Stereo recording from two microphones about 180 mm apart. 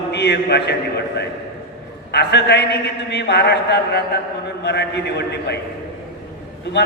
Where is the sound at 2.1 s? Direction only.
65° left (ahead or behind).